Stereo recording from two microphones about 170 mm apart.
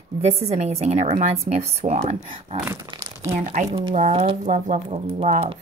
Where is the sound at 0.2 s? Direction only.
40° right (ahead or behind).